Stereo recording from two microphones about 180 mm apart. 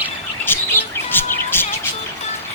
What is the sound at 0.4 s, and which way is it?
Chirp, 10° left (ahead or behind).